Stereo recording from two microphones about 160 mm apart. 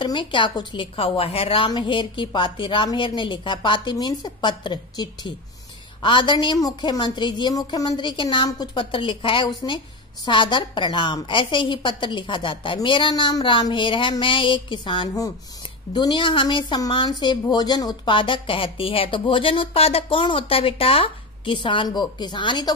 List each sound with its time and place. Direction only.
0.0 s a woman's voice: 30° left (ahead or behind)